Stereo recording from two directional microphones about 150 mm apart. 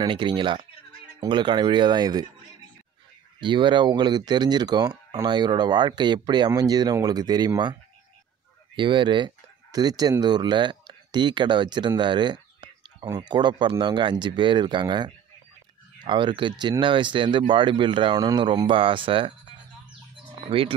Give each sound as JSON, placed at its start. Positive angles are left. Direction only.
{"t": 0.0, "sound": "speech", "side_deg": -30}
{"t": 3.3, "sound": "speech", "side_deg": -30}
{"t": 8.7, "sound": "speech", "side_deg": -35}
{"t": 20.4, "sound": "speech", "side_deg": -40}